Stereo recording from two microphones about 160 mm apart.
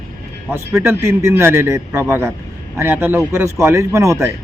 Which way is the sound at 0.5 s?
15° right (ahead or behind).